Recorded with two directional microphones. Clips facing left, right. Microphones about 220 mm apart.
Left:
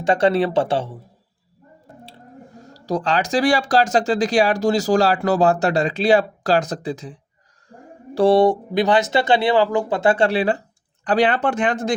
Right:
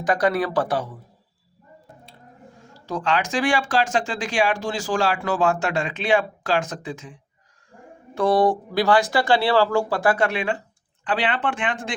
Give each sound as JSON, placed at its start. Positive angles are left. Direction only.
{"t": 0.0, "sound": "speech", "side_deg": 25}
{"t": 2.0, "sound": "speech", "side_deg": 35}
{"t": 7.7, "sound": "a sound", "side_deg": 35}
{"t": 8.1, "sound": "speech", "side_deg": 30}